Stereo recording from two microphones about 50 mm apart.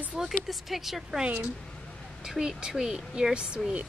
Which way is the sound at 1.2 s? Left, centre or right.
Right.